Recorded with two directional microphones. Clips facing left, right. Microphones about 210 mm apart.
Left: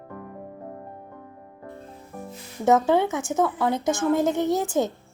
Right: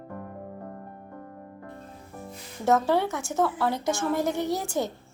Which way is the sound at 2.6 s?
20° left (ahead or behind).